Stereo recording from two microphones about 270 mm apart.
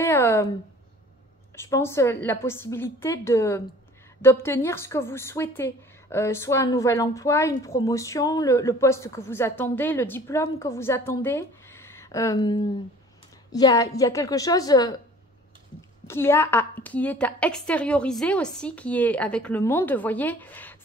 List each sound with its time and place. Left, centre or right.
0.0 s a sound: centre
1.6 s a woman's voice: centre
16.1 s a woman's voice: centre